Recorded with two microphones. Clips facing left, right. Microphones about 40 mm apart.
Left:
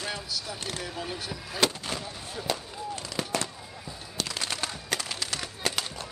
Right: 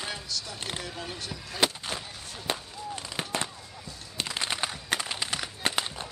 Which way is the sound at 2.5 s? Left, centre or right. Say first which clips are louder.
Even; right.